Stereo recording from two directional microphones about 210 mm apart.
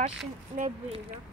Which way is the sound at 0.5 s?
35° right (ahead or behind).